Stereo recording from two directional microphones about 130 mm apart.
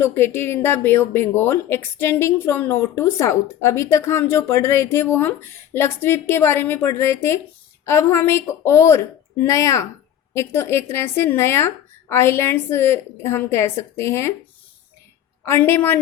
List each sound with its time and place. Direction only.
0.0 s speech: 20° left (ahead or behind)
15.4 s a woman's voice: 20° left (ahead or behind)